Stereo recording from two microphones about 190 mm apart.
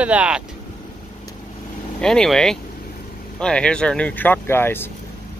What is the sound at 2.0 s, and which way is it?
Speech, 5° left (ahead or behind).